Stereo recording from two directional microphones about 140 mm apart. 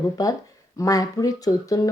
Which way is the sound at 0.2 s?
25° left (ahead or behind).